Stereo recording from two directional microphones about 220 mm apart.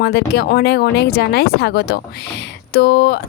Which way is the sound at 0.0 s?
45° left (ahead or behind).